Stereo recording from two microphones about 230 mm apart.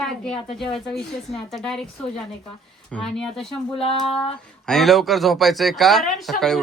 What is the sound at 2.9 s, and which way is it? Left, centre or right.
Speech, centre.